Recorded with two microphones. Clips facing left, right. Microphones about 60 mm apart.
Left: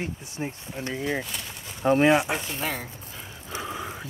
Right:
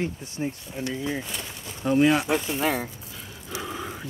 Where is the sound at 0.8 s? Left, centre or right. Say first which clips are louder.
Left 1 dB; left.